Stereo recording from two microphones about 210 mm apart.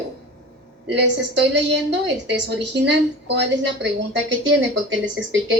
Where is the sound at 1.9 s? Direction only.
55° right (ahead or behind).